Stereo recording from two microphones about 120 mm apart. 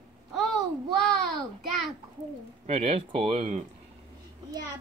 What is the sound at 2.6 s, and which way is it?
Speech, 55° right (ahead or behind).